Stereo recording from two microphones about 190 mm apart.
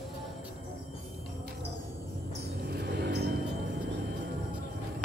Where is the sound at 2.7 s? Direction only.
60° right (ahead or behind).